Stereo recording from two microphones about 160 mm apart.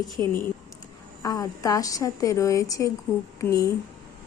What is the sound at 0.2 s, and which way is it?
A woman's voice, 15° left (ahead or behind).